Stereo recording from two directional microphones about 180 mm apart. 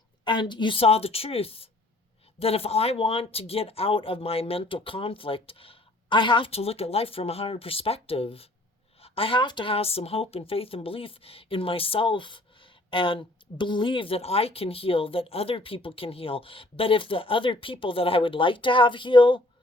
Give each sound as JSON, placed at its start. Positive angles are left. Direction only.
{"t": 0.3, "sound": "speech", "side_deg": 25}